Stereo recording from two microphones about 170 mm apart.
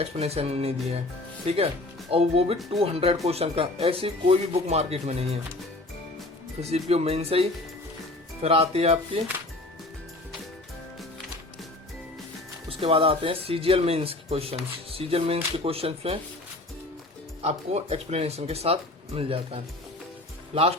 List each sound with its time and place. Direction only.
0.0 s speech: 35° right (ahead or behind)
6.6 s speech: 40° right (ahead or behind)
12.6 s speech: 35° right (ahead or behind)
17.4 s speech: 40° right (ahead or behind)